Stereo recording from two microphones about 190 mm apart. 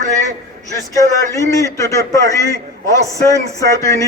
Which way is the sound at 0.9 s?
15° left (ahead or behind).